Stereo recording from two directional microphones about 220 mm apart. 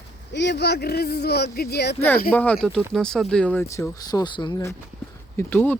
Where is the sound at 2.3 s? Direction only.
5° left (ahead or behind).